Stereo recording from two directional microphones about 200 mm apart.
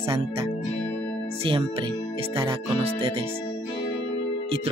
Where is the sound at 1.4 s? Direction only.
25° right (ahead or behind).